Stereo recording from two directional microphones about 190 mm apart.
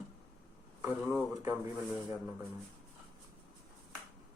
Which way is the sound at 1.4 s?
15° right (ahead or behind).